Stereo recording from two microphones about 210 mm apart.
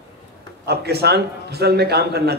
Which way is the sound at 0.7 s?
50° right (ahead or behind).